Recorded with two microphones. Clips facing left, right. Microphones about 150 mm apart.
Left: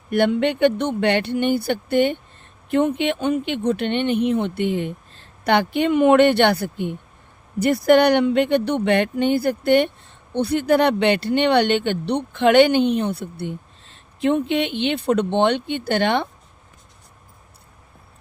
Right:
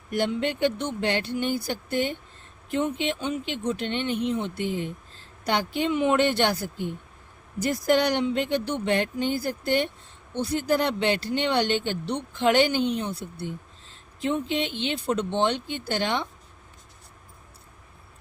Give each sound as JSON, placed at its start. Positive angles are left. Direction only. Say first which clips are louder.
{"t": 0.1, "sound": "speech", "louder": "left 7 dB", "side_deg": 65}